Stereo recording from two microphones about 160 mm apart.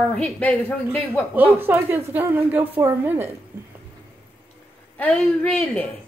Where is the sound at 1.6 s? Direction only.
15° right (ahead or behind).